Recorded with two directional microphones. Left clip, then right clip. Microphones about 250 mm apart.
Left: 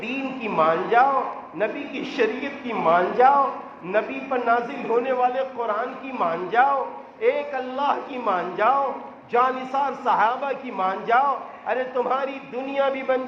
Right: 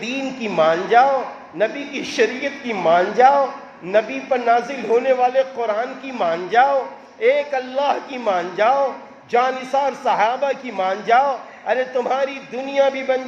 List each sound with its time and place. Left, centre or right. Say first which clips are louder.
0.0 s a man's voice: right 3 dB; right